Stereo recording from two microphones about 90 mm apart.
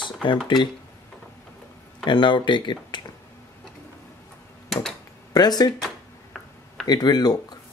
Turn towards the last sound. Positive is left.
turn(degrees=50)  # may be behind; listen again after turning